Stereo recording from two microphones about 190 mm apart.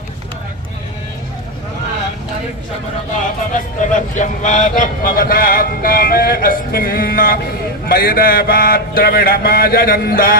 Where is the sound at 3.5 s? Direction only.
45° left (ahead or behind).